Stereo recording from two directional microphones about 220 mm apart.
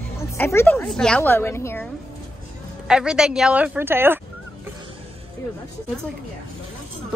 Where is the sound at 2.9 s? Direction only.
5° right (ahead or behind).